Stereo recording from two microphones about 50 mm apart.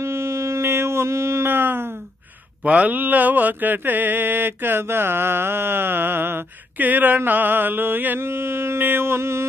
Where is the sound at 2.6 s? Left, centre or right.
Right.